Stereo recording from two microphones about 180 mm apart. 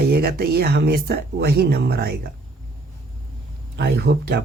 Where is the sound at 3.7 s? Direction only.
65° right (ahead or behind).